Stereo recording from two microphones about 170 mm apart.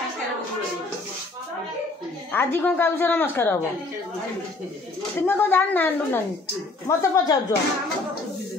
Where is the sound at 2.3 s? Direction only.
15° left (ahead or behind).